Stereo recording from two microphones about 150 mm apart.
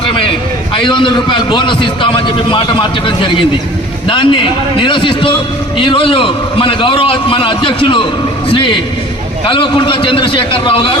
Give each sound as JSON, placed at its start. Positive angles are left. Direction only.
{"t": 0.9, "sound": "a man's voice", "side_deg": 35}